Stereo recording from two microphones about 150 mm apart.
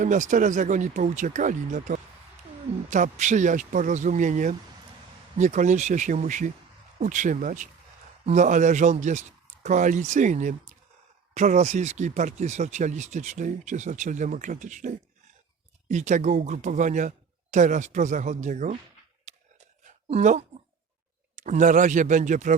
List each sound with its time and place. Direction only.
0.0 s a man's voice: 55° right (ahead or behind)
19.3 s a sound: 50° right (ahead or behind)
20.1 s a man's voice: 50° right (ahead or behind)